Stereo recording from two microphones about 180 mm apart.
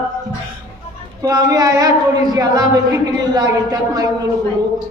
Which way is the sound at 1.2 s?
20° right (ahead or behind).